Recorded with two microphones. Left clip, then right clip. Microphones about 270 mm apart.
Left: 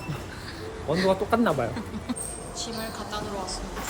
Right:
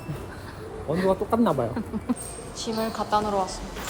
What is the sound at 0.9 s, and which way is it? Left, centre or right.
A woman's voice, centre.